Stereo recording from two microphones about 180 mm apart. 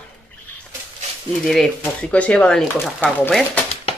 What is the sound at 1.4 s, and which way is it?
Speech, centre (ahead or behind).